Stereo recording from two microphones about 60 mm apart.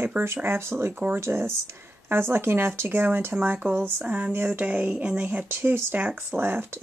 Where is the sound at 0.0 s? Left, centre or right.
Right.